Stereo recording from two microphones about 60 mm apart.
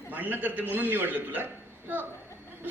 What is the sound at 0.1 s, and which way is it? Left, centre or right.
Speech, right.